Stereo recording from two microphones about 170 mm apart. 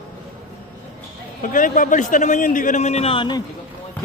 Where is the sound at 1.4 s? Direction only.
50° left (ahead or behind); by 3.4 s 30° left (ahead or behind).